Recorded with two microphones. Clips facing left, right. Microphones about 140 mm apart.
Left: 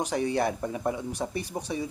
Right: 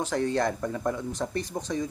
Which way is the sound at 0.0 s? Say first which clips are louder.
Even; 15° left (ahead or behind).